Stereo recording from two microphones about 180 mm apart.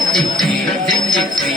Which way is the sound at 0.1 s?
Centre (ahead or behind).